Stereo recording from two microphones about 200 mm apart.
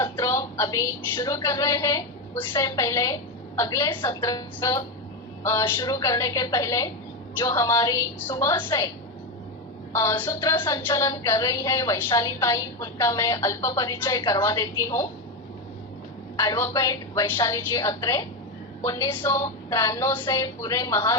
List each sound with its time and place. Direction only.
0.0 s a woman's voice: 15° left (ahead or behind)
9.9 s a woman's voice: 15° left (ahead or behind)
16.4 s a woman's voice: 15° left (ahead or behind)